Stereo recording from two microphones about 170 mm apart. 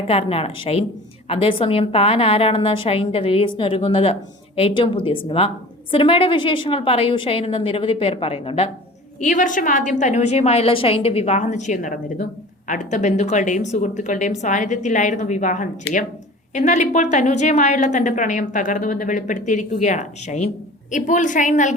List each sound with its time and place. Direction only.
0.1 s a woman's voice: 35° left (ahead or behind)
9.2 s a woman's voice: 50° left (ahead or behind)